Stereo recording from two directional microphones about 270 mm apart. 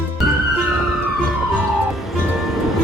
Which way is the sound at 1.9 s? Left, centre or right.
Centre.